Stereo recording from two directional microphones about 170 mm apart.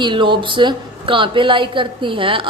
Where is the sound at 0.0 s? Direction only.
30° right (ahead or behind).